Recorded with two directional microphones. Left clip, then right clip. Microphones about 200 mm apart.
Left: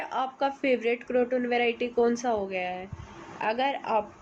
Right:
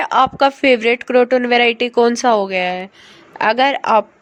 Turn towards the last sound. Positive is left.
turn(degrees=-60)  # may be behind; listen again after turning